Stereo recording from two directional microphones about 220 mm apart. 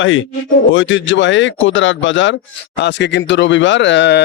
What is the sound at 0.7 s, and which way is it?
Mantra, 60° left (ahead or behind).